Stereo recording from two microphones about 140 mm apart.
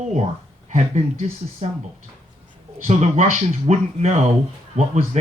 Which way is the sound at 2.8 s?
55° right (ahead or behind).